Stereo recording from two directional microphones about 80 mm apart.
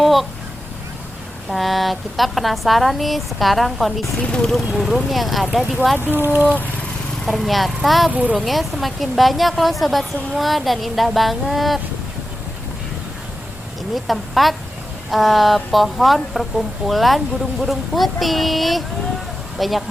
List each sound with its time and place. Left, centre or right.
0.0 s a sound: centre
1.5 s speech: centre
4.2 s speech: centre
4.7 s speech: centre
6.1 s speech: right
7.3 s speech: centre
8.1 s speech: centre
8.4 s speech: centre
13.9 s speech: centre